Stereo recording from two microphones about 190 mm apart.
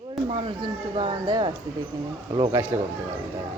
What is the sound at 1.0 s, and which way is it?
Speech, 25° right (ahead or behind).